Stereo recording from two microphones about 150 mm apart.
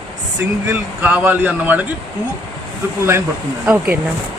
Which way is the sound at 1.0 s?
10° right (ahead or behind).